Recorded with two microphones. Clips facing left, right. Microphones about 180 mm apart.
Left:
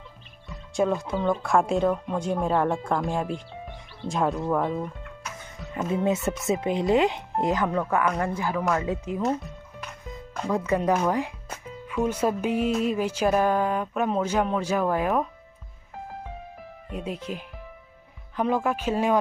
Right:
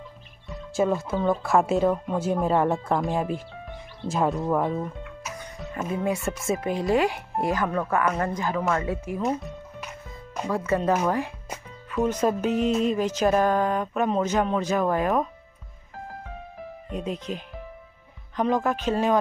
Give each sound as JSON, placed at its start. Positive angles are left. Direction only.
{"t": 0.5, "sound": "speech", "side_deg": -5}
{"t": 5.8, "sound": "speech", "side_deg": 20}
{"t": 8.3, "sound": "music", "side_deg": 10}
{"t": 8.8, "sound": "speech", "side_deg": 20}
{"t": 10.5, "sound": "music", "side_deg": 15}
{"t": 16.9, "sound": "music", "side_deg": 10}